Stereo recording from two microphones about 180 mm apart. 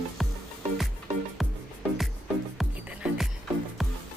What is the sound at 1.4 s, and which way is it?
Music, centre (ahead or behind).